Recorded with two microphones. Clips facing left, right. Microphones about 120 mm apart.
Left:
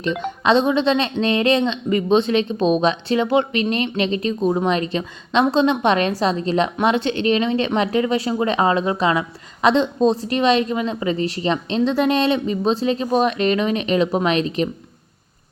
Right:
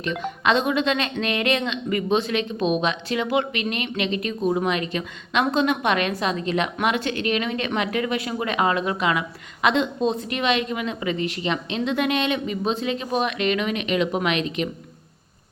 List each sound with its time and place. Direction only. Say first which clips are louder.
0.0 s a woman's voice: left 3 dB; 30° left (ahead or behind)